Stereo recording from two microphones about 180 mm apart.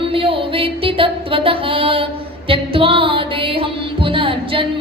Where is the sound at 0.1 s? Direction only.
30° right (ahead or behind).